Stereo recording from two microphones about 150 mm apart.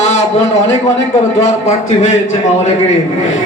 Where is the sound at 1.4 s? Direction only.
45° left (ahead or behind).